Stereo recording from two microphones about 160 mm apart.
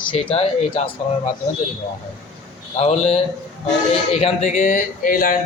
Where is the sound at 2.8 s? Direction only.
40° left (ahead or behind).